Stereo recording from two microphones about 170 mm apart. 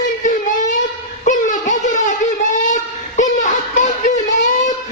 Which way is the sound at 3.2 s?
45° left (ahead or behind).